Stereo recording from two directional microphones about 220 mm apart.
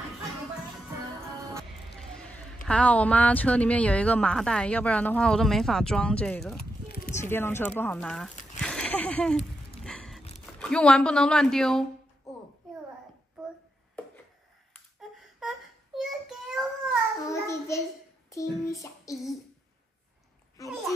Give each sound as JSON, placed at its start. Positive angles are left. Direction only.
{"t": 1.6, "sound": "a sound", "side_deg": 5}
{"t": 2.7, "sound": "speech", "side_deg": 5}
{"t": 6.5, "sound": "a sound", "side_deg": 45}
{"t": 7.2, "sound": "speech", "side_deg": 10}
{"t": 8.5, "sound": "a sound", "side_deg": 5}
{"t": 10.4, "sound": "speech", "side_deg": 5}
{"t": 15.0, "sound": "child singing", "side_deg": 0}
{"t": 17.3, "sound": "child singing", "side_deg": 15}
{"t": 20.6, "sound": "a child's voice", "side_deg": 15}